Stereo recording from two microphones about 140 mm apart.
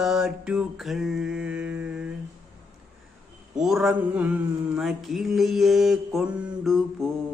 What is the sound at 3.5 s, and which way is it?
Mantra, 5° right (ahead or behind).